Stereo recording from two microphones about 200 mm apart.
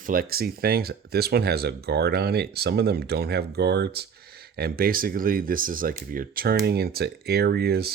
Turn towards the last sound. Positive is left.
turn(degrees=-50)  # may be behind; listen again after turning